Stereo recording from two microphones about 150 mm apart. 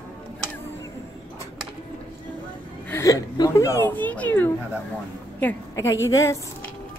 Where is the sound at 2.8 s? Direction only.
20° left (ahead or behind).